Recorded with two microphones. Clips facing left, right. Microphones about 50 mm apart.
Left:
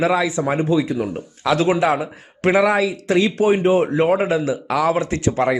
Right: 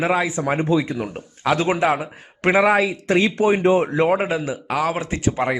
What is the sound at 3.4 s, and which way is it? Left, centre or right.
Speech, right.